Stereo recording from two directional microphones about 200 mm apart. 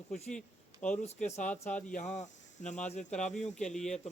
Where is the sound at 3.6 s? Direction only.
5° left (ahead or behind).